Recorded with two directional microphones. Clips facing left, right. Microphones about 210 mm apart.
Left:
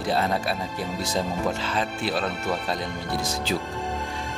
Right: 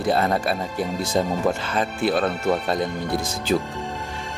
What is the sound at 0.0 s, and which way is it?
Speech, 55° right (ahead or behind).